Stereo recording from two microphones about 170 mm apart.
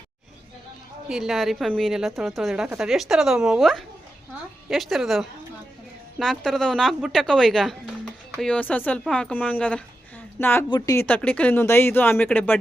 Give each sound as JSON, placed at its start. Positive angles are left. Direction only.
{"t": 1.0, "sound": "a woman's voice", "side_deg": -5}
{"t": 11.0, "sound": "speech", "side_deg": 10}